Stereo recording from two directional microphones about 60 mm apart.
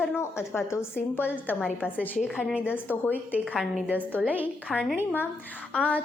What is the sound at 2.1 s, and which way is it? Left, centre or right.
Speech, centre.